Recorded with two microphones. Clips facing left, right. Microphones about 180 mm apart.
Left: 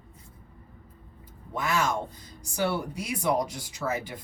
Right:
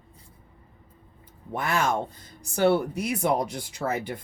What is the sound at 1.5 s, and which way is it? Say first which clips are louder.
Speech: right 2 dB; 55° right (ahead or behind).